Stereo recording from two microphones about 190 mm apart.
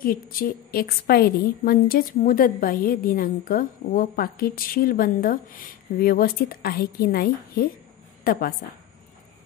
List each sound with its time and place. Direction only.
0.0 s a woman's voice: 50° left (ahead or behind)